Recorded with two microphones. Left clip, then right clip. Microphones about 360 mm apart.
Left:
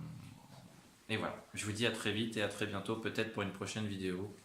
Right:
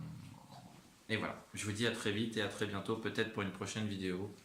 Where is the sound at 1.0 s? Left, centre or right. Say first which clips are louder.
Even; centre.